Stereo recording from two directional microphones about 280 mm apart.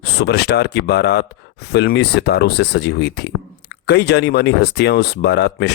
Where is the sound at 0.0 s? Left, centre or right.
Left.